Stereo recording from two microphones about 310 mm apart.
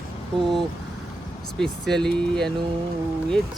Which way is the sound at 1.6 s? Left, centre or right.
Centre.